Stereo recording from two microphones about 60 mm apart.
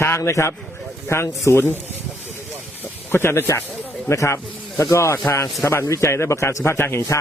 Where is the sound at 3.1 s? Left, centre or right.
Left.